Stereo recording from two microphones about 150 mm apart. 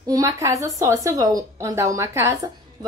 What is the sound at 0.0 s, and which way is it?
Speech, 25° right (ahead or behind).